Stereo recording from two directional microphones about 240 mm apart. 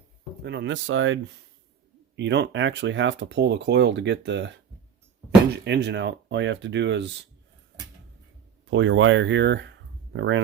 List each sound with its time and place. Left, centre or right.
0.4 s speech: right
5.6 s speech: right
8.7 s speech: right